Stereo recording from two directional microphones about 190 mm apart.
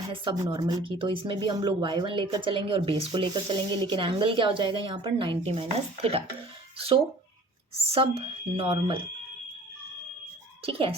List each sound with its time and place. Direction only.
0.4 s speech: 25° right (ahead or behind)
10.7 s speech: 30° right (ahead or behind)